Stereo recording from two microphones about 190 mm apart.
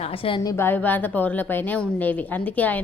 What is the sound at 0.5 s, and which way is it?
A woman's voice, 10° left (ahead or behind).